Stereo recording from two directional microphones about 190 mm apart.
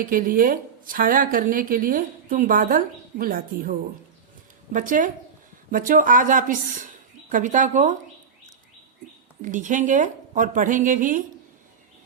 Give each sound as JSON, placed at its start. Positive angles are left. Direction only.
{"t": 0.0, "sound": "a woman's voice", "side_deg": -50}
{"t": 9.4, "sound": "a woman's voice", "side_deg": -40}